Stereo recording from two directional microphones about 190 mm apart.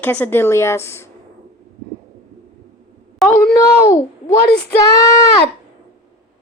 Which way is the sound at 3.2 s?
Centre (ahead or behind).